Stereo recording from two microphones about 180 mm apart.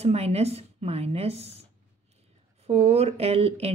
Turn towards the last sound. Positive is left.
turn(degrees=-35)  # may be behind; listen again after turning